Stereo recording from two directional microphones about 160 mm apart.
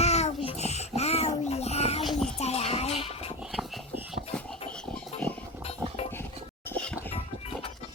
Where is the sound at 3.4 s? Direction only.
Centre (ahead or behind).